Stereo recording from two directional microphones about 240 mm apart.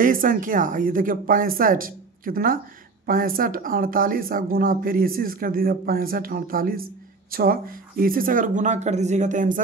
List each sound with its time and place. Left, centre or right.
0.0 s speech: right